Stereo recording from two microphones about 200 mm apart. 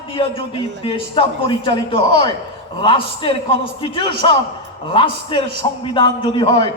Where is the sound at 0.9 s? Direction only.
25° left (ahead or behind).